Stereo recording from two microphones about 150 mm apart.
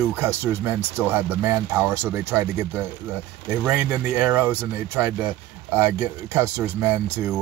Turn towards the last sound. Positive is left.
turn(degrees=-15)  # may be behind; listen again after turning